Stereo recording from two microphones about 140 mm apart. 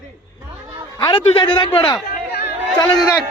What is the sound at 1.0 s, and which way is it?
Speech, 30° left (ahead or behind).